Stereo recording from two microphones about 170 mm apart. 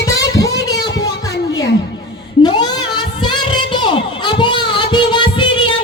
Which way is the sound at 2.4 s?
25° left (ahead or behind).